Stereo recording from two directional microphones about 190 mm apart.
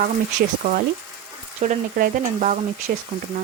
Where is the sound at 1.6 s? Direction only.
45° right (ahead or behind).